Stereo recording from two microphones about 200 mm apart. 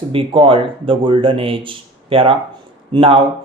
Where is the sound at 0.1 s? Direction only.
25° right (ahead or behind).